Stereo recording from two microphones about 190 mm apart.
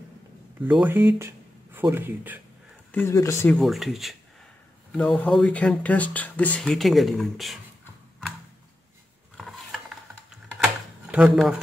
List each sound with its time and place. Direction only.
0.6 s speech: 10° right (ahead or behind)
2.9 s speech: 15° left (ahead or behind)
9.4 s ratchet: centre (ahead or behind)
11.1 s speech: 5° right (ahead or behind)